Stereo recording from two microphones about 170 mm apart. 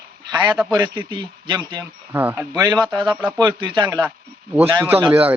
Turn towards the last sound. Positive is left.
turn(degrees=-10)  # may be behind; listen again after turning